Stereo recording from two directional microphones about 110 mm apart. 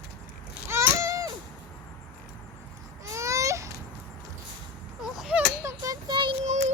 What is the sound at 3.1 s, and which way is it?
Baby cry, 30° right (ahead or behind).